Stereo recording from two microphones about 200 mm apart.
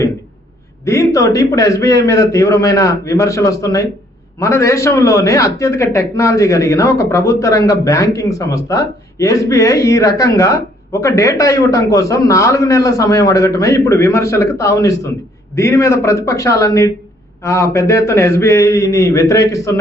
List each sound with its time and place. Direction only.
0.9 s a man's voice: 15° left (ahead or behind)